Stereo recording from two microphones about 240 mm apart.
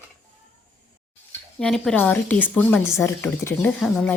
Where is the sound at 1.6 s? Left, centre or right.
Centre.